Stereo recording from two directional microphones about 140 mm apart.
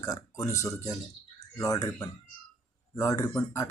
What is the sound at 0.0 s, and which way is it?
Speech, 25° left (ahead or behind).